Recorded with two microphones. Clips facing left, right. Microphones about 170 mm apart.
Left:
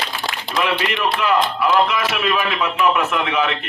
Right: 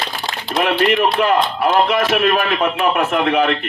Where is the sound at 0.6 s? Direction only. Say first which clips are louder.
Right 5 dB; 50° right (ahead or behind).